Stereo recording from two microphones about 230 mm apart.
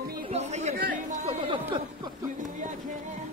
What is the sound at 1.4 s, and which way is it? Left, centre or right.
Speech, right.